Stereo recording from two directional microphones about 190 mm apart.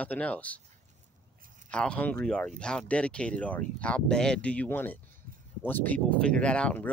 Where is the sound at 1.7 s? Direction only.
5° left (ahead or behind).